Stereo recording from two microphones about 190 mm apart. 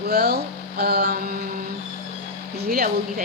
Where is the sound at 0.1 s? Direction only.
55° right (ahead or behind).